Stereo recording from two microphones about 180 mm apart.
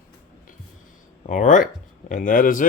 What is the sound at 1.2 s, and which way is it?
Speech, 45° left (ahead or behind).